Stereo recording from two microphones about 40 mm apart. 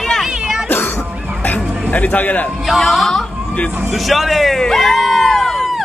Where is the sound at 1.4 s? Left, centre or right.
Left.